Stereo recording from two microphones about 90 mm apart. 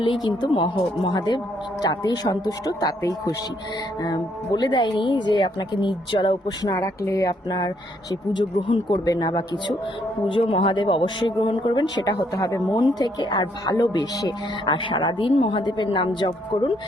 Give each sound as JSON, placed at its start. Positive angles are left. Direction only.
{"t": 0.0, "sound": "speech", "side_deg": 60}
{"t": 6.6, "sound": "speech", "side_deg": 40}
{"t": 8.6, "sound": "speech", "side_deg": 60}
{"t": 9.0, "sound": "speech", "side_deg": 50}
{"t": 10.2, "sound": "speech", "side_deg": 80}
{"t": 12.7, "sound": "speech", "side_deg": 45}
{"t": 14.6, "sound": "speech", "side_deg": 65}